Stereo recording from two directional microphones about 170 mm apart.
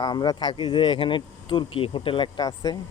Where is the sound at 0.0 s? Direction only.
25° left (ahead or behind).